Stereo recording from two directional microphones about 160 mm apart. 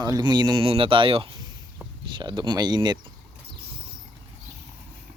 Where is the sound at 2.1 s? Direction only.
30° right (ahead or behind).